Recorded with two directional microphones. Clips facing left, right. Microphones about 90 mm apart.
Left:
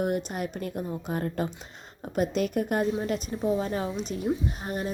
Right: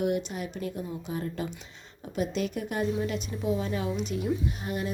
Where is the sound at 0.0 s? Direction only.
40° left (ahead or behind).